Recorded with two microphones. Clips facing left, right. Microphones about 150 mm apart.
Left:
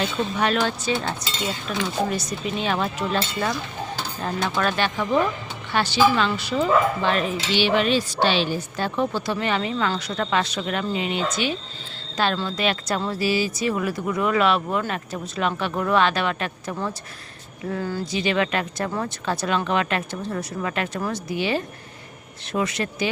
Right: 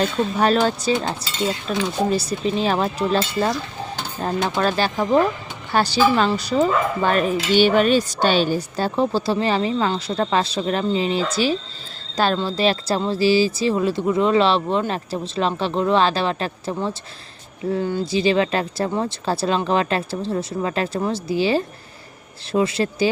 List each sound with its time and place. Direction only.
0.0 s speech: 35° right (ahead or behind)